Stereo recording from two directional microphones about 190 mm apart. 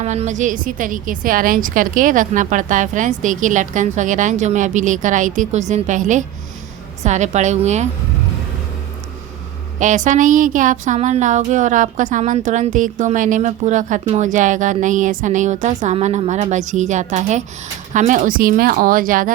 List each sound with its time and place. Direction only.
0.0 s a woman's voice: 35° right (ahead or behind)
9.7 s a woman's voice: 40° right (ahead or behind)